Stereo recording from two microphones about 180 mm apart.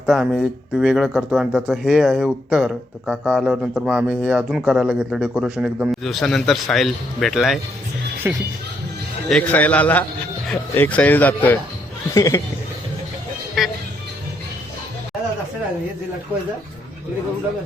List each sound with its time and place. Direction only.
0.0 s speech: 5° right (ahead or behind)
8.2 s speech: 10° right (ahead or behind)
9.3 s speech: 10° left (ahead or behind)
13.6 s speech: centre (ahead or behind)